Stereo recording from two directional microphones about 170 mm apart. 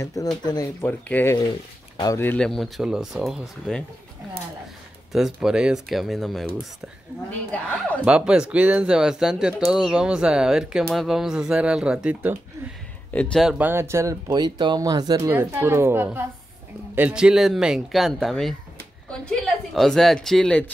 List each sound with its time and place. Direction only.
0.0 s speech: 20° left (ahead or behind)
0.8 s speech: 10° left (ahead or behind)
5.1 s speech: centre (ahead or behind)
8.0 s speech: 5° right (ahead or behind)
13.1 s speech: 5° left (ahead or behind); by 15.3 s 25° right (ahead or behind)
15.3 s speech: 15° right (ahead or behind); by 20.7 s 5° left (ahead or behind)